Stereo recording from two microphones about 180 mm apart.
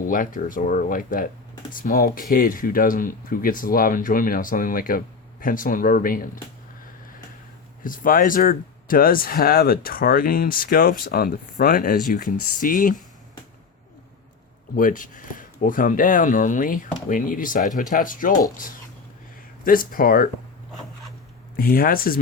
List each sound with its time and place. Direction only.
0.0 s speech: 50° left (ahead or behind)
7.9 s speech: 50° left (ahead or behind)
14.8 s speech: 50° left (ahead or behind)
19.6 s speech: 50° left (ahead or behind)
21.5 s speech: 55° left (ahead or behind)